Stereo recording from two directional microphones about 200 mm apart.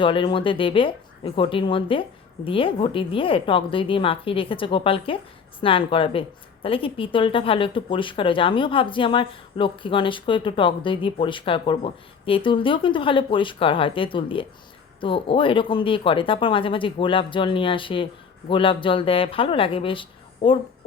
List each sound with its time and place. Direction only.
0.0 s speech: 25° left (ahead or behind)